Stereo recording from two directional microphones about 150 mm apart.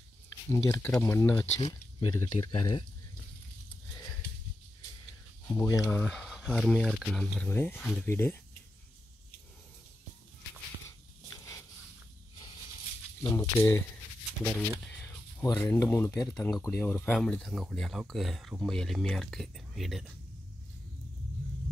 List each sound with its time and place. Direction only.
0.5 s speech: 20° left (ahead or behind)
1.6 s speech: 25° left (ahead or behind)
5.5 s speech: 20° left (ahead or behind)
5.9 s speech: 10° left (ahead or behind)
7.4 s speech: 15° left (ahead or behind)
13.2 s speech: 20° left (ahead or behind)
14.9 s speech: 20° left (ahead or behind)
16.3 s speech: centre (ahead or behind)
16.6 s speech: 15° left (ahead or behind); by 20.1 s centre (ahead or behind)